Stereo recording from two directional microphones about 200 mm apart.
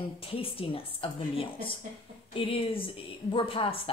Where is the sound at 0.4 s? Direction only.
30° left (ahead or behind).